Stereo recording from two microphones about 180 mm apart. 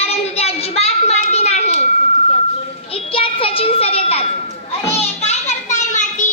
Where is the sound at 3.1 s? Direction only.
30° left (ahead or behind).